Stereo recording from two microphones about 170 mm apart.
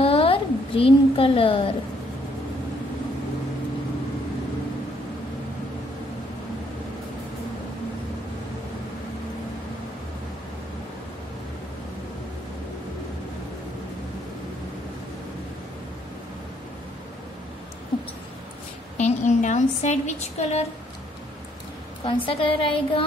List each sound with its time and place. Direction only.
0.0 s a sound: 35° left (ahead or behind)
18.9 s a woman's voice: 45° left (ahead or behind)
22.0 s a woman's voice: 30° left (ahead or behind)